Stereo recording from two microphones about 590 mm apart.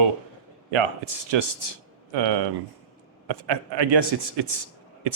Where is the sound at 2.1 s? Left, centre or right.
Right.